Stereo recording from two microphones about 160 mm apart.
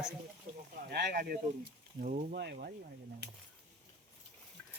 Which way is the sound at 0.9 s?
90° right.